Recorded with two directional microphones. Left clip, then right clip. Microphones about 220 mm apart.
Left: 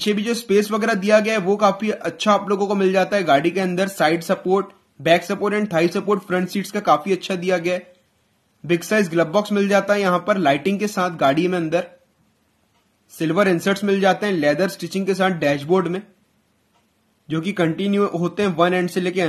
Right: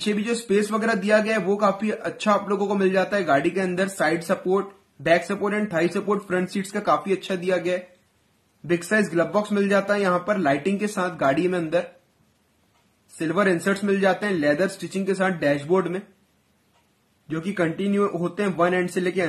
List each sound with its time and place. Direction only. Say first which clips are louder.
0.0 s a man's voice: left 4 dB; 30° left (ahead or behind)
13.2 s speech: left 3 dB; 30° left (ahead or behind)
17.3 s speech: left 4 dB; 30° left (ahead or behind)